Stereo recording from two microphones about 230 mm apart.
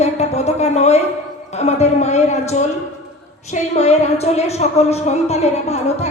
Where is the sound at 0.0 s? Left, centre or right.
Left.